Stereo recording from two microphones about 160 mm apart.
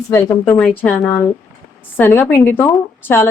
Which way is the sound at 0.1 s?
15° left (ahead or behind).